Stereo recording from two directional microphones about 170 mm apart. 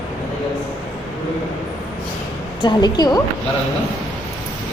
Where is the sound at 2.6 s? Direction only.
25° left (ahead or behind).